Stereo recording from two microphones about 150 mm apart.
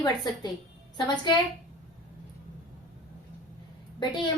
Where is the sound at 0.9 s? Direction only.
30° left (ahead or behind).